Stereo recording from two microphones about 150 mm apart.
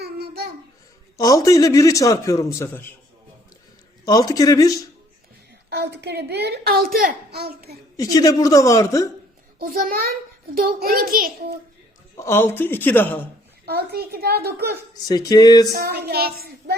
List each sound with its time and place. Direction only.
0.0 s babbling: 90° right
1.1 s a man's voice: 25° left (ahead or behind)
4.0 s a man's voice: 25° left (ahead or behind)
5.8 s a child's voice: 90° right
7.9 s a man's voice: 25° left (ahead or behind)
9.6 s a child's voice: 75° right (ahead or behind)
12.1 s a man's voice: 20° left (ahead or behind)
13.7 s a child's voice: 90° right
15.0 s a man's voice: 25° left (ahead or behind)
15.7 s a child's voice: 90° right